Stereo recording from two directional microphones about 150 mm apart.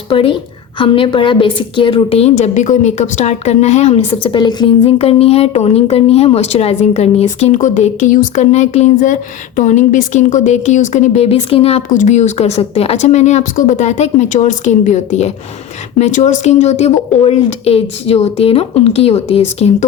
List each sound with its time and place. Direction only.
0.1 s a woman's voice: 40° left (ahead or behind)
4.9 s speech: 40° left (ahead or behind)
11.9 s speech: 55° left (ahead or behind)